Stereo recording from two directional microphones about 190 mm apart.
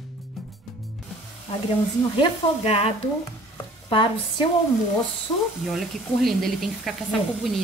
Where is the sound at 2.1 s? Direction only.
30° left (ahead or behind).